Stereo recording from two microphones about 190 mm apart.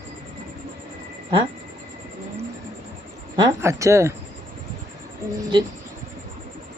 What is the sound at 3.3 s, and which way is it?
Speech, 20° right (ahead or behind).